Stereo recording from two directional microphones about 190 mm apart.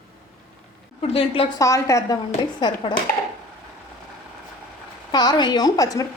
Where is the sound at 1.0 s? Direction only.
30° left (ahead or behind).